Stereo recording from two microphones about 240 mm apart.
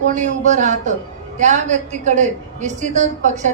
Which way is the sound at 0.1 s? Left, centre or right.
Right.